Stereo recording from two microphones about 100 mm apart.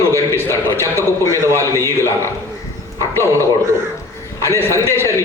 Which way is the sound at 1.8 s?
25° left (ahead or behind).